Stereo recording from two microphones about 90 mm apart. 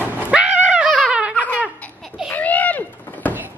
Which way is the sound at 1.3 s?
20° left (ahead or behind).